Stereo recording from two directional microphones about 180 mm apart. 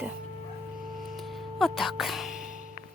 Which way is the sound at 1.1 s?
Centre (ahead or behind).